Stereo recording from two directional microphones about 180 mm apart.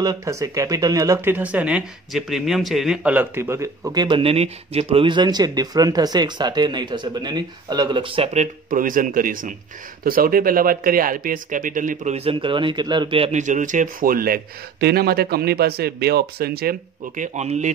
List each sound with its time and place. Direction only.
0.0 s speech: 20° right (ahead or behind); by 17.6 s 40° right (ahead or behind)